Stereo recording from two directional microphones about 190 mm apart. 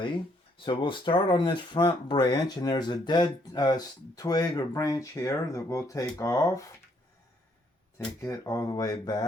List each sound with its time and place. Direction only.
0.0 s speech: 25° left (ahead or behind)
8.2 s speech: 15° left (ahead or behind)